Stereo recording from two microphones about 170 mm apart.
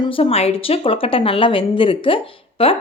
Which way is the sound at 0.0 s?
35° left (ahead or behind).